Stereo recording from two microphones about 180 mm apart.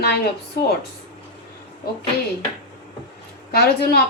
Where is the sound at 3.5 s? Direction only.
60° left (ahead or behind).